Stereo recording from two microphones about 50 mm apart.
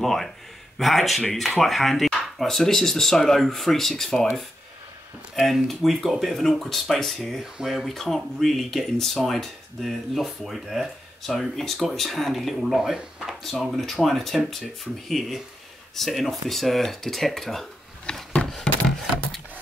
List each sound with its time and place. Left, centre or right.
0.0 s speech: centre
5.4 s speech: centre
18.0 s a sound: centre